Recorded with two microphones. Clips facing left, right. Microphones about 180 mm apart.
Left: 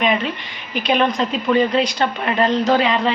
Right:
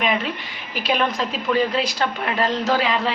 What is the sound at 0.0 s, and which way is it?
A woman's voice, centre (ahead or behind).